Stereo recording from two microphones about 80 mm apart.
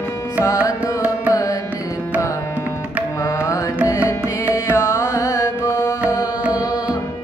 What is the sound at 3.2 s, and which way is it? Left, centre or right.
Music, left.